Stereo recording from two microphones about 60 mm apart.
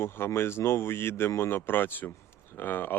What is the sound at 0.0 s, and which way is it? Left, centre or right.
Speech, left.